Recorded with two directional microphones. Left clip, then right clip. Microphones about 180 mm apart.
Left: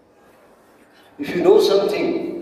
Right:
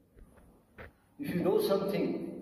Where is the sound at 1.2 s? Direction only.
35° left (ahead or behind).